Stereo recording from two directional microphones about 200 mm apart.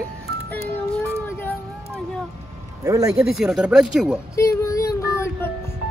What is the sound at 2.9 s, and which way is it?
Speech, 15° right (ahead or behind).